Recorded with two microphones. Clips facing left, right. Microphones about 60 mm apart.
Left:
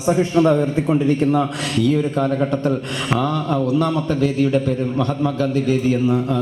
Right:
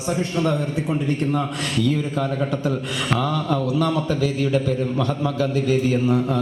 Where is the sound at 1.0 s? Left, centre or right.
Centre.